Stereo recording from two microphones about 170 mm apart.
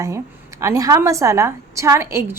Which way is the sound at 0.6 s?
20° right (ahead or behind).